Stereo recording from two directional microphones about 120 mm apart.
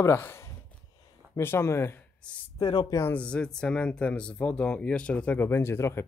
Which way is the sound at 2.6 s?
40° left (ahead or behind).